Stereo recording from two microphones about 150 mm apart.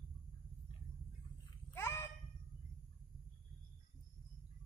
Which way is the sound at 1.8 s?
15° left (ahead or behind).